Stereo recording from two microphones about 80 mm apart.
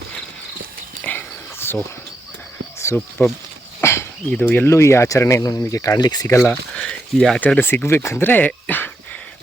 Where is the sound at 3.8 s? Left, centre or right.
Left.